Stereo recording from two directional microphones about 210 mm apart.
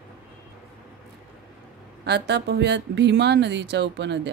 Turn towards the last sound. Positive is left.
turn(degrees=-55)  # may be behind; listen again after turning